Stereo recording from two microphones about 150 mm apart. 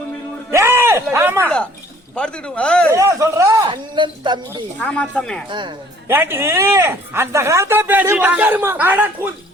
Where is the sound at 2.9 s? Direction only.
20° right (ahead or behind).